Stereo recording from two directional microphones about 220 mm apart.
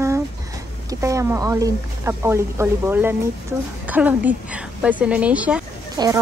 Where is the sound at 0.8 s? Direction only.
15° right (ahead or behind).